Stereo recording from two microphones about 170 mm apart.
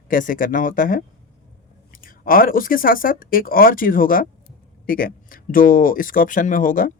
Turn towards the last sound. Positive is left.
turn(degrees=50)  # may be behind; listen again after turning